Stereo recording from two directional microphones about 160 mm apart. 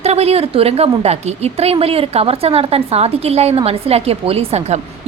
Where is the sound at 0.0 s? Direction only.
40° right (ahead or behind).